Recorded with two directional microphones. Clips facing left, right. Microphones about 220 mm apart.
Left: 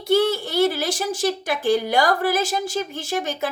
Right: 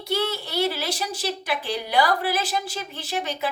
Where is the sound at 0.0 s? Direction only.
50° left (ahead or behind).